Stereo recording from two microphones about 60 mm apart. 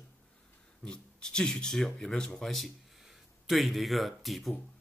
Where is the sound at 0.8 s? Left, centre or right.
Centre.